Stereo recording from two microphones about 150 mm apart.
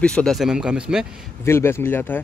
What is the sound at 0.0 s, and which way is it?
Speech, 5° left (ahead or behind).